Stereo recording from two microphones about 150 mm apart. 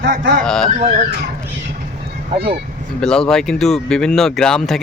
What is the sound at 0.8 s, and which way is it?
Speech, 50° right (ahead or behind).